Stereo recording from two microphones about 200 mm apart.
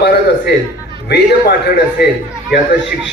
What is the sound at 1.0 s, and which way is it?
Speech, 55° left (ahead or behind).